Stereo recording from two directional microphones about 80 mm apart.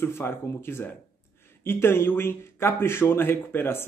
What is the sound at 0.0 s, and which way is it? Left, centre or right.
Speech, left.